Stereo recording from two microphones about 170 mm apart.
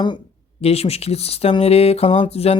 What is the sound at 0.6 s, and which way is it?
Speech, 35° left (ahead or behind).